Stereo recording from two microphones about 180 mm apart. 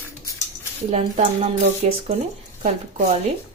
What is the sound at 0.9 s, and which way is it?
Speech, 35° right (ahead or behind).